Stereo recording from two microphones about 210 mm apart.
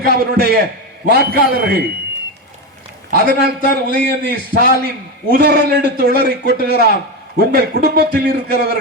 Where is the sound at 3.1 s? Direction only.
45° right (ahead or behind).